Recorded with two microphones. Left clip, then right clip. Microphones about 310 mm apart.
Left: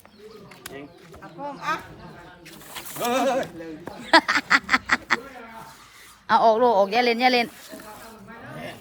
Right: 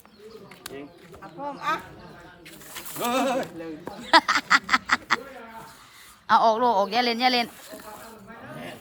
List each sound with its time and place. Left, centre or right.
1.5 s speech: centre
6.2 s speech: centre